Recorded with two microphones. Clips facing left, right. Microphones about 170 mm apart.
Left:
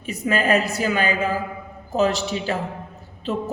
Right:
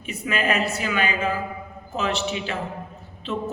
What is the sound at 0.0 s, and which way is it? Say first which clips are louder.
A man's voice: left 4 dB; 40° left (ahead or behind).